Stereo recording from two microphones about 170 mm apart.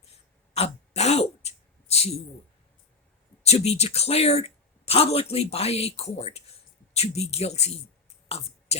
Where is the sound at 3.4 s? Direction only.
40° left (ahead or behind).